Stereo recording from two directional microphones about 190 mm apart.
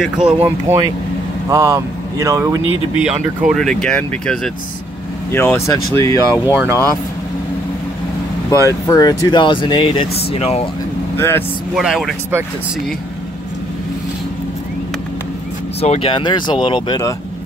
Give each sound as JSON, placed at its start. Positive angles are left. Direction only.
{"t": 0.0, "sound": "speech", "side_deg": -5}
{"t": 3.0, "sound": "speech", "side_deg": -5}
{"t": 6.5, "sound": "speech", "side_deg": -10}
{"t": 8.6, "sound": "speech", "side_deg": 15}
{"t": 11.1, "sound": "speech", "side_deg": 10}
{"t": 11.7, "sound": "speech", "side_deg": 0}
{"t": 15.8, "sound": "speech", "side_deg": 30}